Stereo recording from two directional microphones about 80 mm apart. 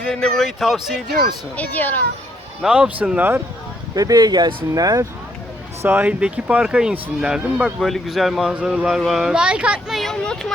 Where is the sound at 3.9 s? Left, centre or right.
Right.